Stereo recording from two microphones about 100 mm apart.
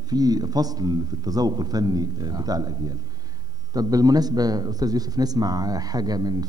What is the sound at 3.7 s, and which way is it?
A man's voice, 40° right (ahead or behind).